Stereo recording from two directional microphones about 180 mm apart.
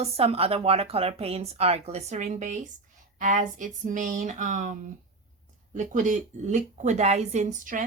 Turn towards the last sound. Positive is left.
turn(degrees=-45)  # may be behind; listen again after turning